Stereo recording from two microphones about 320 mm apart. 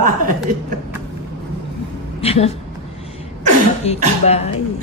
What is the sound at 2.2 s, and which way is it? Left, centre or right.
Speech, centre.